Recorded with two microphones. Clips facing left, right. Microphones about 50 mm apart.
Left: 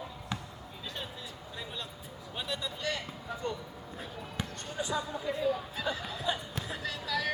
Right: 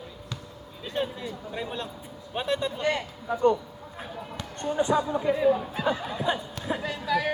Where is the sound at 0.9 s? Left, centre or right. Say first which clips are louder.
Right 16 dB; right.